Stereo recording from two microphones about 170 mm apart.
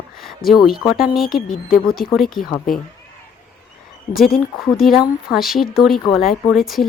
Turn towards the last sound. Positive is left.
turn(degrees=0)  # may be behind; listen again after turning